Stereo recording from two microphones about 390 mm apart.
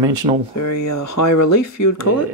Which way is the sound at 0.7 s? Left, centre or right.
Left.